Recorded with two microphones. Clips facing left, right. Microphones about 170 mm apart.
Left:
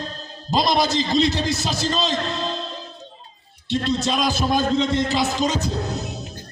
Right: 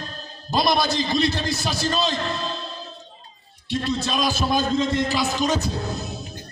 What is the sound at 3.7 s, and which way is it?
A man's voice, 25° left (ahead or behind).